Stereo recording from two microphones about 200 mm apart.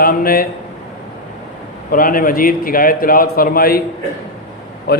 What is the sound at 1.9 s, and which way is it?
A man's voice, 45° left (ahead or behind).